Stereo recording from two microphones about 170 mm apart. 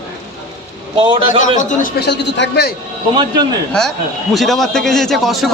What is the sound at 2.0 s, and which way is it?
Speech, 85° left.